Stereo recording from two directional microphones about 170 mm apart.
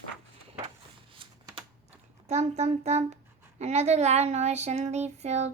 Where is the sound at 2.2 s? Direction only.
40° right (ahead or behind).